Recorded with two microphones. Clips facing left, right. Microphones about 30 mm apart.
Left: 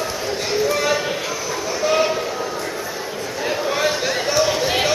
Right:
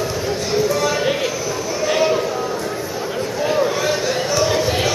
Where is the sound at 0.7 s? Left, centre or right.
Centre.